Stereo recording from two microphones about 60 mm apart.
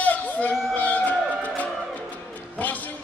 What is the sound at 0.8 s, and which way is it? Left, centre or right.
Music, left.